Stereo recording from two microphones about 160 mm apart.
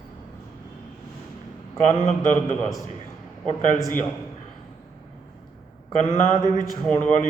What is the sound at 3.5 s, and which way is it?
Speech, 50° left (ahead or behind).